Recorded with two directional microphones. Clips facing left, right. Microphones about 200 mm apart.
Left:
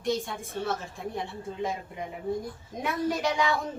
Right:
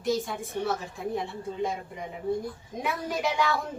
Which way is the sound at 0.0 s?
Centre (ahead or behind).